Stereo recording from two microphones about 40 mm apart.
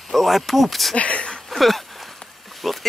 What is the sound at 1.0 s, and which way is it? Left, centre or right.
Speech, left.